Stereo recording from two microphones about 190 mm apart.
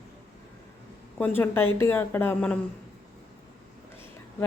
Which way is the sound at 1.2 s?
10° left (ahead or behind).